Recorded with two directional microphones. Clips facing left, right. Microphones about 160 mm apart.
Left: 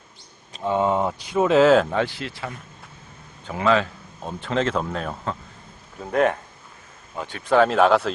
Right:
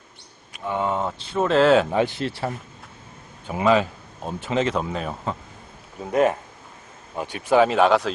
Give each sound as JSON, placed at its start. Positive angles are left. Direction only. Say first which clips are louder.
{"t": 0.6, "sound": "speech", "louder": "left 3 dB", "side_deg": 20}
{"t": 1.3, "sound": "speech", "louder": "left 1 dB", "side_deg": 5}
{"t": 1.9, "sound": "speech", "louder": "right 2 dB", "side_deg": -15}
{"t": 3.4, "sound": "speech", "louder": "right 1 dB", "side_deg": -15}